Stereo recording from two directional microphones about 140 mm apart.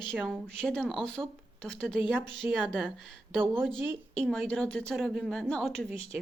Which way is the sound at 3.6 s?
Centre (ahead or behind).